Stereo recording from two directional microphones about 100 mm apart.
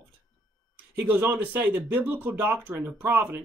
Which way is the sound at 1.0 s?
20° right (ahead or behind).